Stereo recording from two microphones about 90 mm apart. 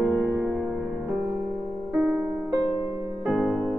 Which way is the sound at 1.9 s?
10° right (ahead or behind).